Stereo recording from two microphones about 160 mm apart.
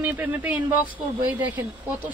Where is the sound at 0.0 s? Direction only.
10° right (ahead or behind).